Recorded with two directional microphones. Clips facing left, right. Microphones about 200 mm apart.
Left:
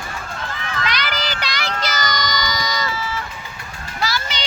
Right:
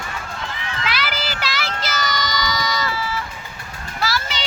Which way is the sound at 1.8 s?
Centre (ahead or behind).